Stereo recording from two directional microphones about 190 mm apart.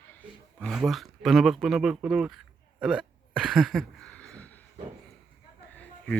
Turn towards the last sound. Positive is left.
turn(degrees=5)  # may be behind; listen again after turning